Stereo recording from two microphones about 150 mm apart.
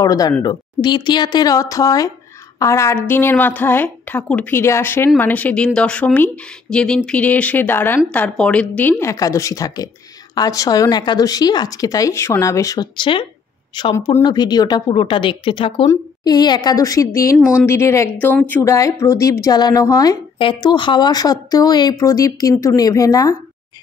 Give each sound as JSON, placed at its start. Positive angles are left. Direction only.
{"t": 0.0, "sound": "a woman's voice", "side_deg": 25}